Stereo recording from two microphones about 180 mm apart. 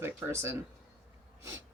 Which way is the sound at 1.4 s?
15° right (ahead or behind).